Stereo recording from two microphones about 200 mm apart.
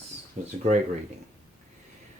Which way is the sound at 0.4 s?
40° right (ahead or behind).